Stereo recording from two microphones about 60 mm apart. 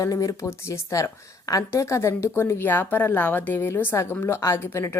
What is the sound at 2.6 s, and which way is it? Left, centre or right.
Speech, left.